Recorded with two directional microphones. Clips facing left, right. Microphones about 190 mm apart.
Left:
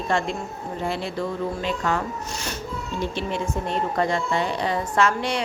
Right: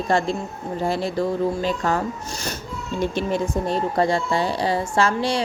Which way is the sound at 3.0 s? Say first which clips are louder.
Right 5 dB; 45° right (ahead or behind).